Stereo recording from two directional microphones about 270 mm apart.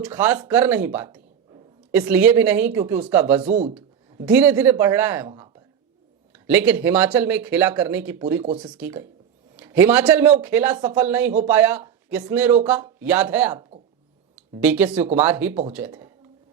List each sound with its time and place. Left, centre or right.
0.1 s a man's voice: centre
3.4 s speech: right
4.3 s a man's voice: centre
5.3 s a sound: centre
6.5 s a man's voice: centre
8.4 s speech: centre
8.8 s a man's voice: centre